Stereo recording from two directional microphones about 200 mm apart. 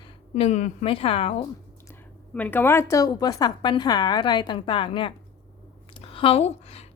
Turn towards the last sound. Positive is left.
turn(degrees=30)  # may be behind; listen again after turning